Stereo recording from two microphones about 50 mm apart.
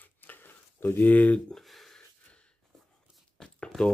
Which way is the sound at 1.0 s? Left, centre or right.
Left.